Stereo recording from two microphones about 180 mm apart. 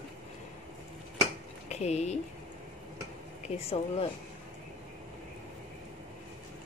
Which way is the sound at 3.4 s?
35° left (ahead or behind).